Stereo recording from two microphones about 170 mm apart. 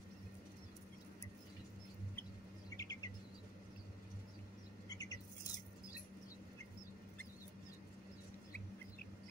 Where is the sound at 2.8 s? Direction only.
20° left (ahead or behind).